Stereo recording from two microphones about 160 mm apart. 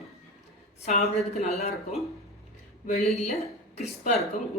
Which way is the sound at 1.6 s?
40° left (ahead or behind).